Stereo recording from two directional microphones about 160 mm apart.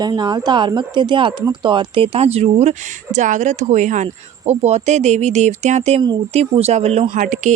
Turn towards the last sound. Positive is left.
turn(degrees=-50)  # may be behind; listen again after turning